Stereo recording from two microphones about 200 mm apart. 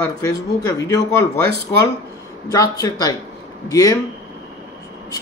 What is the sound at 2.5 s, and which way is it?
A man's voice, 15° left (ahead or behind).